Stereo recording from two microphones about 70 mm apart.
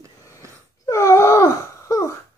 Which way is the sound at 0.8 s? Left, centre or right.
Left.